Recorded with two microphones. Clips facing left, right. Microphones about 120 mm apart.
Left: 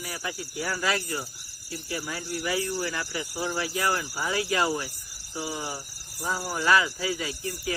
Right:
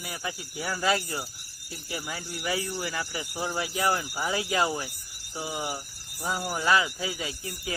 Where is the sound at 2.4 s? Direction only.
20° right (ahead or behind).